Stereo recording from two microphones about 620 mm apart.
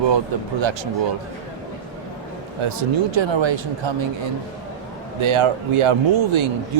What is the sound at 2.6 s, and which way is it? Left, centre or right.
Speech, right.